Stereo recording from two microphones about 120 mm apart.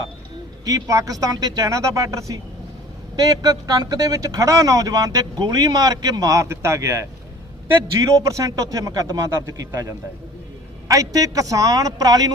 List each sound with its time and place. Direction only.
0.6 s a man's voice: 30° right (ahead or behind)
8.1 s a man's voice: 25° right (ahead or behind)